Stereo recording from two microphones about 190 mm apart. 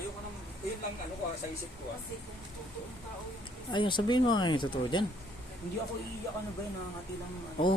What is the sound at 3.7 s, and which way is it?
A man's voice, 25° left (ahead or behind).